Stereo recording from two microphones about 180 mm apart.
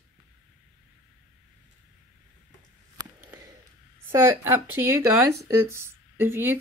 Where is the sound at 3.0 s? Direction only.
20° right (ahead or behind).